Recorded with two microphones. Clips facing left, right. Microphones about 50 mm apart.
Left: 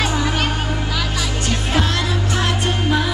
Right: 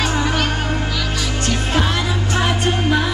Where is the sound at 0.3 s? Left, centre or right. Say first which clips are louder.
Right 1 dB; centre.